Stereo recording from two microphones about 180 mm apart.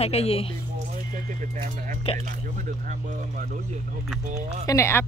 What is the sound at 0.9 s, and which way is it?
Horse, 45° right (ahead or behind).